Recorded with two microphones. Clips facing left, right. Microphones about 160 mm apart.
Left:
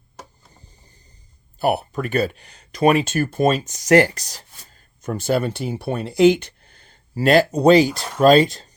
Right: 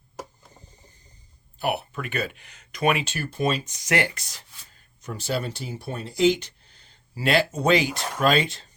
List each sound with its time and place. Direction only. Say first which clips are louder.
1.5 s speech: left 7 dB; 40° left (ahead or behind)